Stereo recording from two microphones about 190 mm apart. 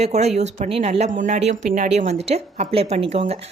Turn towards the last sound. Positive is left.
turn(degrees=-30)  # may be behind; listen again after turning